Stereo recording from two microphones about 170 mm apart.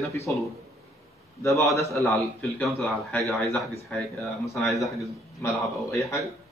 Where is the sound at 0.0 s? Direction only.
15° left (ahead or behind).